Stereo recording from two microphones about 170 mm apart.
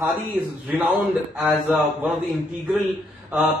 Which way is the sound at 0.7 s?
10° right (ahead or behind).